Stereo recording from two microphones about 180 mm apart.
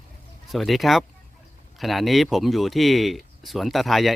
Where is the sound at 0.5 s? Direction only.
Centre (ahead or behind).